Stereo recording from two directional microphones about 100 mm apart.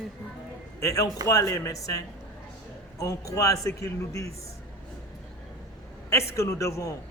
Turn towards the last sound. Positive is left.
turn(degrees=30)  # may be behind; listen again after turning